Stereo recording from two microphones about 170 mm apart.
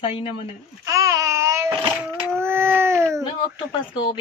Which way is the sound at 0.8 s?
20° right (ahead or behind).